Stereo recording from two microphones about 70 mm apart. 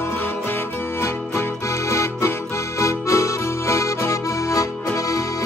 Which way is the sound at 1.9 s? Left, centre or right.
Left.